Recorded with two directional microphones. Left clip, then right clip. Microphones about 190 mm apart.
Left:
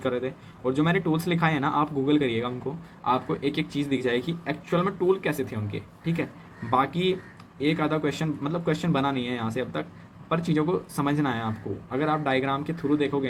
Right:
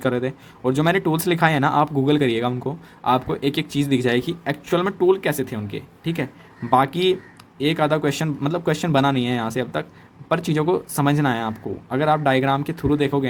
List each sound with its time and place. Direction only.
0.0 s speech: 45° right (ahead or behind)